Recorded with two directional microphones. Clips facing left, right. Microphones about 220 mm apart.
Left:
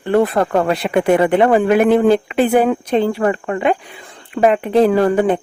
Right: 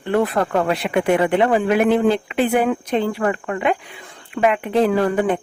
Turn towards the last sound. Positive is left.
turn(degrees=35)  # may be behind; listen again after turning